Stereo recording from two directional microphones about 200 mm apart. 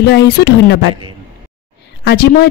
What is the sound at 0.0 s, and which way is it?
Speech, 60° left (ahead or behind).